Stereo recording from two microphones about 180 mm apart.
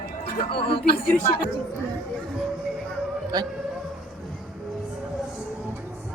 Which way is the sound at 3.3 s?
20° right (ahead or behind).